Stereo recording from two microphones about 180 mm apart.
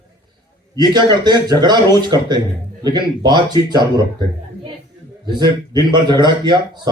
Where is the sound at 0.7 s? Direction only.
25° right (ahead or behind).